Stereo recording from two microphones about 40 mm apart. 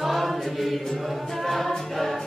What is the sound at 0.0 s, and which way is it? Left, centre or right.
Music, centre.